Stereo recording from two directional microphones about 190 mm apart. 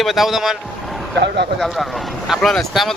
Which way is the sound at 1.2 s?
65° right (ahead or behind).